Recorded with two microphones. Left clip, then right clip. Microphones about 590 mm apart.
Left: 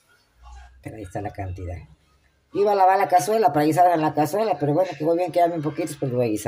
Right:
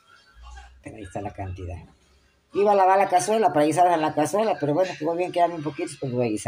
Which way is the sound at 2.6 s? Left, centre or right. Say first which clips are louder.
Even; left.